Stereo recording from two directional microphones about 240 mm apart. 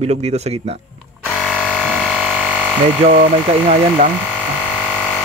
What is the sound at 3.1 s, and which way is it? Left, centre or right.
Speech, right.